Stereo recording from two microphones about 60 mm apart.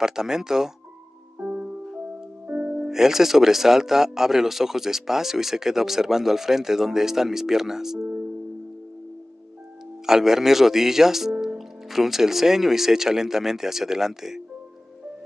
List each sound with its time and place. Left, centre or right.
0.0 s speech: centre
1.4 s music: centre
2.4 s speech: right; by 8.1 s centre
10.0 s speech: centre